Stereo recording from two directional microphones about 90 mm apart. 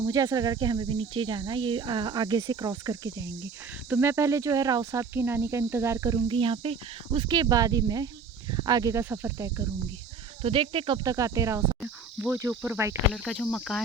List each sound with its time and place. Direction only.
0.1 s speech: 45° right (ahead or behind)
3.8 s speech: 25° right (ahead or behind)
5.1 s speech: 25° right (ahead or behind)
6.2 s speech: 75° right (ahead or behind); by 7.3 s 90° right
7.3 s speech: 50° right (ahead or behind)
9.0 s speech: 25° right (ahead or behind)
10.4 s speech: 80° right
11.0 s speech: 40° right (ahead or behind)
12.2 s speech: 25° right (ahead or behind)
13.2 s speech: 10° left (ahead or behind)